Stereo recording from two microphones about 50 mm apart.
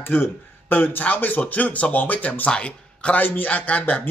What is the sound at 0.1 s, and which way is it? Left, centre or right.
Speech, left.